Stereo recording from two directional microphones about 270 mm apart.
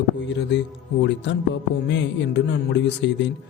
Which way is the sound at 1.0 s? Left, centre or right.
Left.